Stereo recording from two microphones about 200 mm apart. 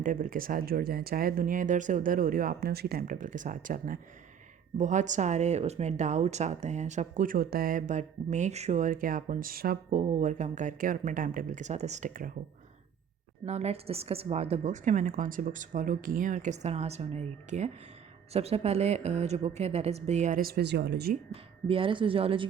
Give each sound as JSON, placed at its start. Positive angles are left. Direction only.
{"t": 0.0, "sound": "speech", "side_deg": -40}
{"t": 13.4, "sound": "speech", "side_deg": -30}
{"t": 21.7, "sound": "speech", "side_deg": -25}